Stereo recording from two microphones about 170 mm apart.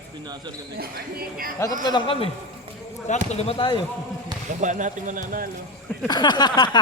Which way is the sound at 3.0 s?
45° left (ahead or behind).